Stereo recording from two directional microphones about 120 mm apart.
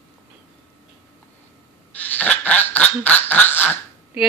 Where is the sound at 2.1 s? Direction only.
15° left (ahead or behind).